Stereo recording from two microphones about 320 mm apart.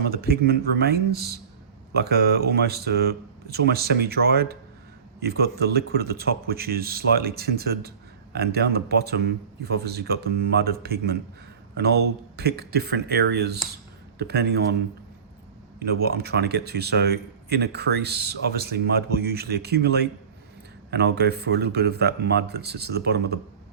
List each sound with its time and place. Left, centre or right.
0.1 s speech: right
15.8 s speech: right